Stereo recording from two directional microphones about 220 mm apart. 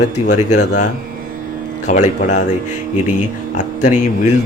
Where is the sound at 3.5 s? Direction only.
35° left (ahead or behind).